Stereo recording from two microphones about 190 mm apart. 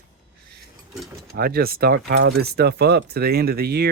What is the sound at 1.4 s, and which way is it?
Speech, 55° right (ahead or behind).